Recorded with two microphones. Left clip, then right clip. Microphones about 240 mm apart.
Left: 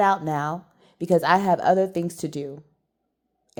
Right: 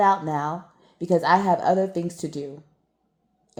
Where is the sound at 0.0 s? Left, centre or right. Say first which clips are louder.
Right 1 dB; left.